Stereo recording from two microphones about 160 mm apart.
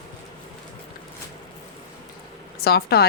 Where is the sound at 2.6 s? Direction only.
80° left.